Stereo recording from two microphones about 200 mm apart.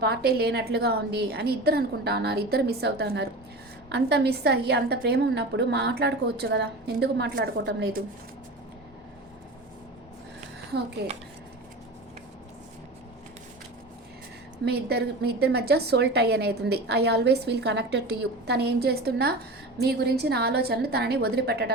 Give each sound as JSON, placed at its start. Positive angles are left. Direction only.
{"t": 0.0, "sound": "a woman's voice", "side_deg": -50}
{"t": 11.0, "sound": "a woman's voice", "side_deg": -55}
{"t": 14.6, "sound": "a woman's voice", "side_deg": -55}